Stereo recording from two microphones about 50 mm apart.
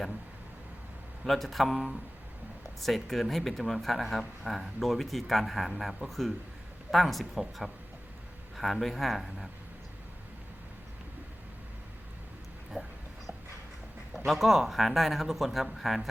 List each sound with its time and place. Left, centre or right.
1.2 s speech: centre
12.7 s a sound: centre
14.3 s speech: centre